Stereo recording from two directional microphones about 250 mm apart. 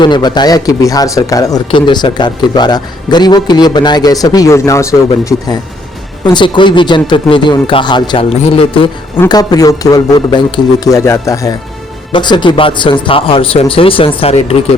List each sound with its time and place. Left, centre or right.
0.0 s speech: centre